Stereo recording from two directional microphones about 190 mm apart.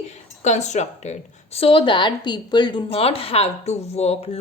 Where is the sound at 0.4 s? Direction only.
35° left (ahead or behind).